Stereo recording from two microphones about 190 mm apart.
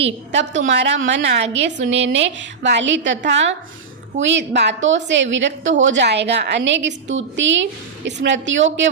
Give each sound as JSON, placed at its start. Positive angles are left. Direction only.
{"t": 0.0, "sound": "a woman's voice", "side_deg": -70}